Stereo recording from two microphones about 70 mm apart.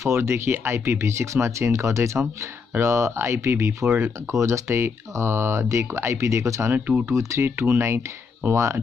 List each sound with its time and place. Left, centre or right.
0.0 s speech: right
3.8 s speech: right
4.3 s speech: right
6.7 s speech: right
7.1 s speech: right